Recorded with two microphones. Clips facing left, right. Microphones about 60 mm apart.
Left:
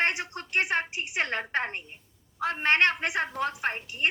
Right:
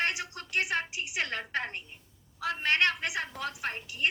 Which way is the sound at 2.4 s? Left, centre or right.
Left.